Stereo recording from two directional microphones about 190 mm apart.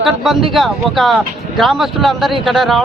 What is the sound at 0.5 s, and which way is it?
Speech, centre (ahead or behind).